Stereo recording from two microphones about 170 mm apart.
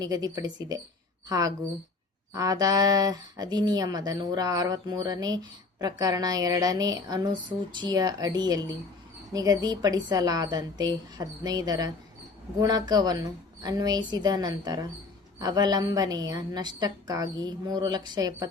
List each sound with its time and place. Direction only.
0.0 s speech: 20° right (ahead or behind)